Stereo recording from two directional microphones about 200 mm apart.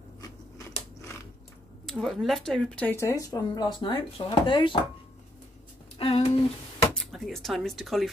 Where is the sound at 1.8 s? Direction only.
Centre (ahead or behind); by 4.8 s 25° left (ahead or behind).